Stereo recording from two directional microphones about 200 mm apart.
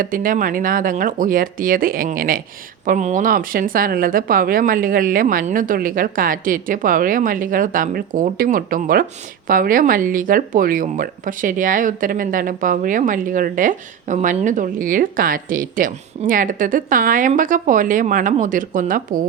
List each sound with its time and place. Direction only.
0.0 s speech: 45° right (ahead or behind)